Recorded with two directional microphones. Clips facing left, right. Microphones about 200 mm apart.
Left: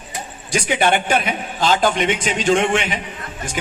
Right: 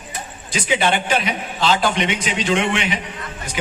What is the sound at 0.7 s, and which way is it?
A man's voice, 55° left (ahead or behind).